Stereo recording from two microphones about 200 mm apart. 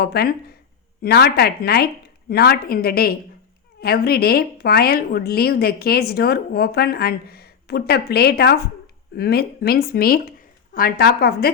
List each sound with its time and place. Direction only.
0.0 s a woman's voice: 50° left (ahead or behind)